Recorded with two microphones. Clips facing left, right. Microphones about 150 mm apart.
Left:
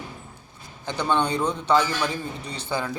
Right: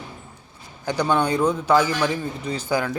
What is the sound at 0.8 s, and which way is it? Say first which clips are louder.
Speech: right 3 dB; 10° right (ahead or behind).